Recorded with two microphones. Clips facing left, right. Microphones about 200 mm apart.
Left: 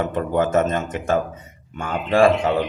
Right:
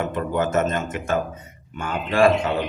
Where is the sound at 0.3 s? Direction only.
30° left (ahead or behind).